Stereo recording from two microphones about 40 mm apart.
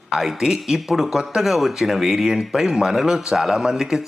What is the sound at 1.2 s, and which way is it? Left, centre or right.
Speech, centre.